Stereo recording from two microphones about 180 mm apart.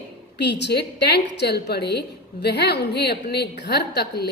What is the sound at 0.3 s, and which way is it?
A woman's voice, 70° left (ahead or behind).